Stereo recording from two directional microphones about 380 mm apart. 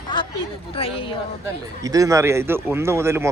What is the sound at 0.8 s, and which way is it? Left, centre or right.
Speech, centre.